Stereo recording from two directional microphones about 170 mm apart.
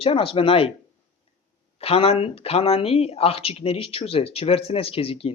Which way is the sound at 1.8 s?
35° left (ahead or behind).